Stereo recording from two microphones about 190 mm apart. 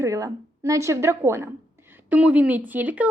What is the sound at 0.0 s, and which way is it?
A woman's voice, 15° right (ahead or behind).